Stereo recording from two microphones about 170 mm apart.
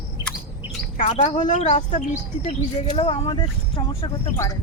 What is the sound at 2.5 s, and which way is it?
Speech, 30° left (ahead or behind).